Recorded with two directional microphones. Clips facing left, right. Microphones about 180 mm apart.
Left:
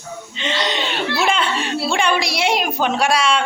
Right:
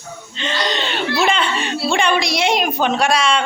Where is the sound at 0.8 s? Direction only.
5° left (ahead or behind).